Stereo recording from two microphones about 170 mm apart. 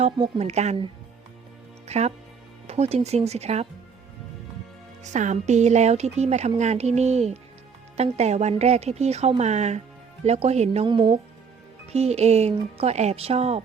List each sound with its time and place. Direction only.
0.0 s speech: 35° right (ahead or behind)
1.9 s speech: 40° right (ahead or behind)
5.0 s a woman's voice: 45° right (ahead or behind)